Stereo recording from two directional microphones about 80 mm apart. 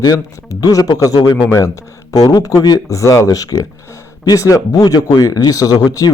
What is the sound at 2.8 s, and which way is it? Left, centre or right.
A man's voice, left.